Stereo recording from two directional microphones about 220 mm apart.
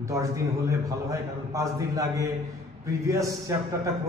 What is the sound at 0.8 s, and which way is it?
A man's voice, 15° right (ahead or behind).